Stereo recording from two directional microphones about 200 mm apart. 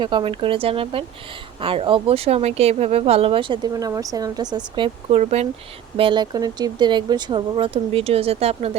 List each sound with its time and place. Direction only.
0.0 s speech: 25° right (ahead or behind)